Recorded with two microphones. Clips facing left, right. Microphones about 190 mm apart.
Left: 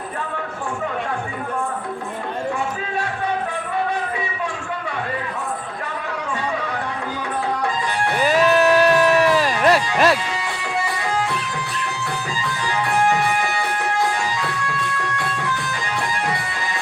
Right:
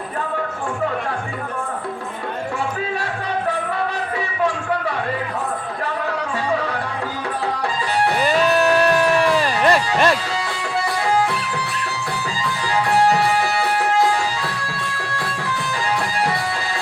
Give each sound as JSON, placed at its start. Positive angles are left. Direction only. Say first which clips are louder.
{"t": 8.2, "sound": "music", "louder": "left 3 dB", "side_deg": 0}
{"t": 9.6, "sound": "speech", "louder": "left 1 dB", "side_deg": 0}
{"t": 12.7, "sound": "music", "louder": "right 3 dB", "side_deg": -35}